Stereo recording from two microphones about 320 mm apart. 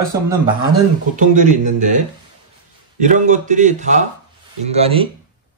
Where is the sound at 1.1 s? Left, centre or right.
Right.